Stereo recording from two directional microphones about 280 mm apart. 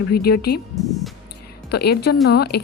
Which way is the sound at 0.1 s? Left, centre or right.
Left.